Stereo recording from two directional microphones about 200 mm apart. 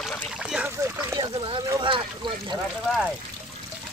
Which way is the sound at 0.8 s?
20° right (ahead or behind).